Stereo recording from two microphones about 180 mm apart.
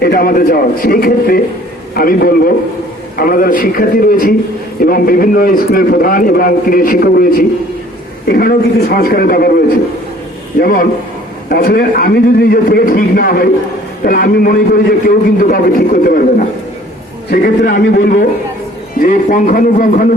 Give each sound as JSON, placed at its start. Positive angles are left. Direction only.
{"t": 0.0, "sound": "a man's voice", "side_deg": 60}